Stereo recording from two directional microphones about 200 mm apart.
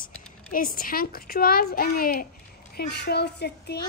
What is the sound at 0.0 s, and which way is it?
A woman's voice, 45° left (ahead or behind).